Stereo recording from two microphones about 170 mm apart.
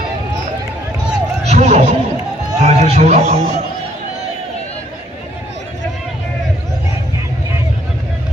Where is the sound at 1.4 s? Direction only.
40° right (ahead or behind).